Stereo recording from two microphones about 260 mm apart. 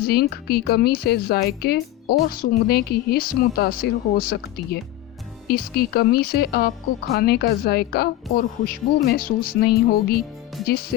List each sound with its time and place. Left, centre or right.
0.1 s speech: left